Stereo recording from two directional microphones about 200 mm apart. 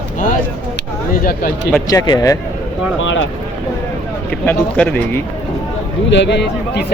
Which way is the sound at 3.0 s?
75° left (ahead or behind).